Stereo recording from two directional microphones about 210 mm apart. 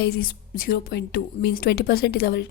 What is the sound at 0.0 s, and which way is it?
A woman's voice, 45° left (ahead or behind).